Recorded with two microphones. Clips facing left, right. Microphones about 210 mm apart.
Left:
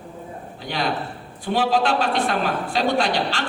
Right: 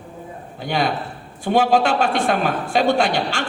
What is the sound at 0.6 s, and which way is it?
A man's voice, 50° right (ahead or behind).